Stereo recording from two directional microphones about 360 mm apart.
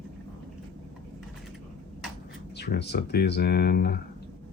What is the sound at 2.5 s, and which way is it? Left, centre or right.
Speech, left.